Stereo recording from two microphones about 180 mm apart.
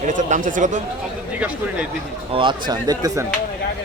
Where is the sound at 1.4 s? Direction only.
10° right (ahead or behind).